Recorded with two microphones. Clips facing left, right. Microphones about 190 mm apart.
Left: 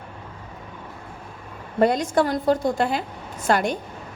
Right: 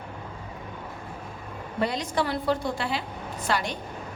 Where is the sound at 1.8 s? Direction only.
50° left (ahead or behind).